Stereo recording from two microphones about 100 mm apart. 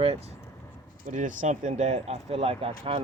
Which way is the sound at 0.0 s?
85° right.